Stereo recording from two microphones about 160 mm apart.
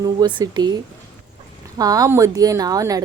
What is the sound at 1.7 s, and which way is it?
A woman's voice, 20° right (ahead or behind).